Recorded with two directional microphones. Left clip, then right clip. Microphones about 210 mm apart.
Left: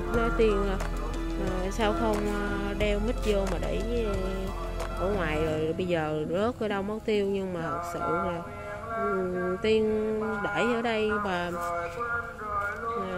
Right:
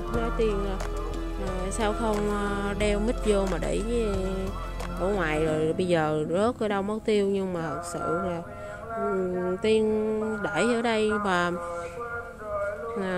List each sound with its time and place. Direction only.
0.1 s music: centre (ahead or behind)
1.8 s speech: 10° right (ahead or behind)
2.6 s speech: 25° right (ahead or behind)